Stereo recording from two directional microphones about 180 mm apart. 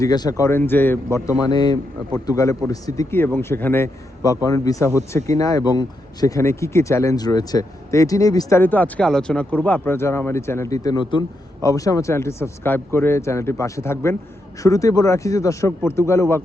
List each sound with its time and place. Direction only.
0.0 s speech: 20° left (ahead or behind)
1.5 s speech: 20° left (ahead or behind)